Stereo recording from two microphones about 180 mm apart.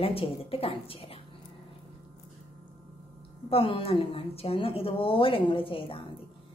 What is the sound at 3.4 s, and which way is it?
A woman's voice, 30° left (ahead or behind).